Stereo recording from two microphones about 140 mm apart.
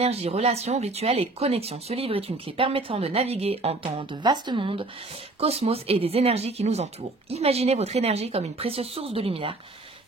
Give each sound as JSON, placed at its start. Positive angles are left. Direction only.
{"t": 0.0, "sound": "speech", "side_deg": -45}